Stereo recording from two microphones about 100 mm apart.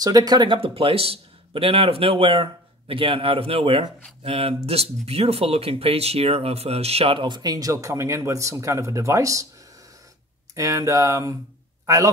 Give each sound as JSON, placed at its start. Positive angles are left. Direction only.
{"t": 0.0, "sound": "speech", "side_deg": -40}
{"t": 0.6, "sound": "a man's voice", "side_deg": -70}
{"t": 7.2, "sound": "speech", "side_deg": -50}
{"t": 10.5, "sound": "speech", "side_deg": -30}